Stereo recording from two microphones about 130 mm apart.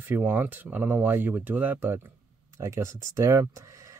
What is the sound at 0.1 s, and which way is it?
Speech, 15° right (ahead or behind).